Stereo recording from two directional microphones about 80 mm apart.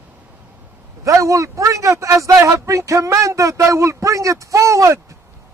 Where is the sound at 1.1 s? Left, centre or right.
Right.